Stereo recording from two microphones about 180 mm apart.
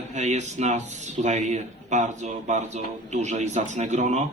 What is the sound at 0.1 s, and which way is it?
Speech, 40° right (ahead or behind).